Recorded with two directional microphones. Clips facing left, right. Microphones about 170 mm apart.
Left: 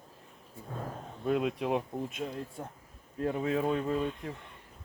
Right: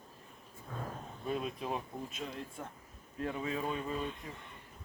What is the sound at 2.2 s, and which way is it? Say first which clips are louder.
Speech: left 5 dB; 40° left (ahead or behind).